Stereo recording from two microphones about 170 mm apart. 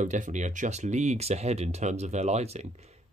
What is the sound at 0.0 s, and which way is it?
Speech, 45° right (ahead or behind).